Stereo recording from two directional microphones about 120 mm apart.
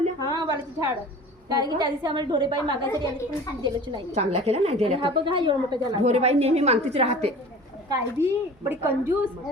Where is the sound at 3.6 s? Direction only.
45° right (ahead or behind).